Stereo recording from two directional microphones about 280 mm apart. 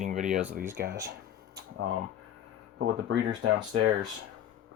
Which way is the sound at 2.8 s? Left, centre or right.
Right.